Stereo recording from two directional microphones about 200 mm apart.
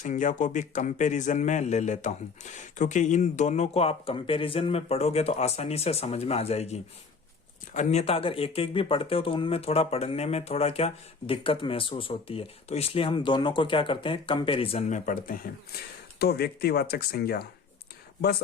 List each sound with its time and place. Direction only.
0.0 s speech: 40° left (ahead or behind)
16.1 s speech: 50° left (ahead or behind)